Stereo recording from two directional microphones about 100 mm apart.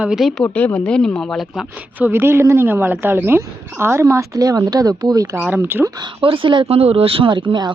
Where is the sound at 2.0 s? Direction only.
20° right (ahead or behind); by 5.4 s 40° right (ahead or behind).